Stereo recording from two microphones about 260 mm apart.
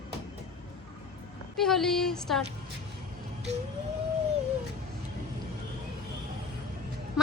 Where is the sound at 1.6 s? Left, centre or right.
Centre.